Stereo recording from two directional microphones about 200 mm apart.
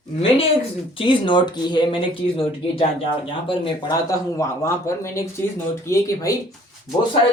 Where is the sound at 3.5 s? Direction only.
20° left (ahead or behind).